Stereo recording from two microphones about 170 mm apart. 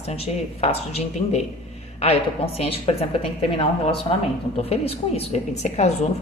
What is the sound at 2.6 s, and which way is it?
A woman's voice, 35° left (ahead or behind).